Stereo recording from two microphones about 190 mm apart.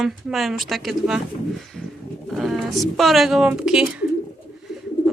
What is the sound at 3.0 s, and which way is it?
A woman's voice, centre (ahead or behind).